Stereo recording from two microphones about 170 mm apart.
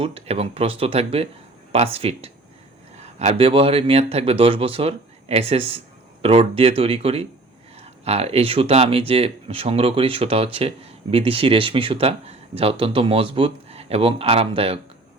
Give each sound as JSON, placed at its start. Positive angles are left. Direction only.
{"t": 0.0, "sound": "speech", "side_deg": -35}